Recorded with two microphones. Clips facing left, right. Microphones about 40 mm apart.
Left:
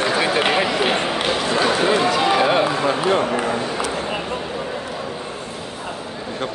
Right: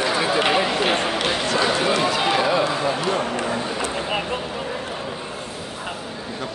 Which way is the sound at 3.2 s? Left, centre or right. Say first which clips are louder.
Left 4 dB; centre.